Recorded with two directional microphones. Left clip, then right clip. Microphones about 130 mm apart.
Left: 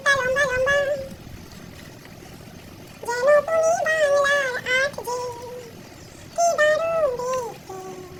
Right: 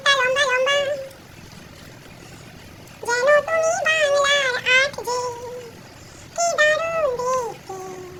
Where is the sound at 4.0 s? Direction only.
40° right (ahead or behind).